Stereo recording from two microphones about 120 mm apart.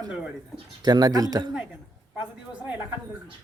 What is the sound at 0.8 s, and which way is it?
Speech, 35° right (ahead or behind).